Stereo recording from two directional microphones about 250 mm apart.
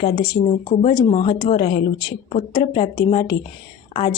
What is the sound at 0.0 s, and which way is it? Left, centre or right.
A woman's voice, left.